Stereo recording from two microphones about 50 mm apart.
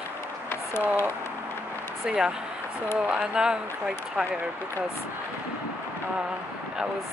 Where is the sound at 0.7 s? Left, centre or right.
Left.